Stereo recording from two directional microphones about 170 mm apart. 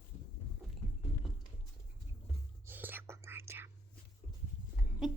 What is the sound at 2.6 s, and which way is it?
Whispering, 10° right (ahead or behind).